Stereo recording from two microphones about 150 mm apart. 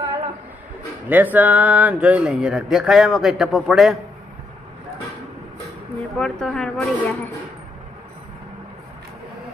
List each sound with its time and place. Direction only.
1.0 s a man's voice: 10° right (ahead or behind)
6.1 s a man's voice: 5° left (ahead or behind)